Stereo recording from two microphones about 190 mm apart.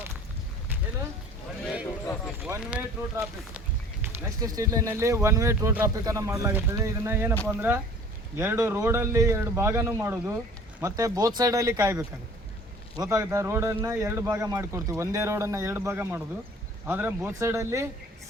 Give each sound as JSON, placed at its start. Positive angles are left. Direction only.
{"t": 2.4, "sound": "speech", "side_deg": -5}
{"t": 4.0, "sound": "speech", "side_deg": -20}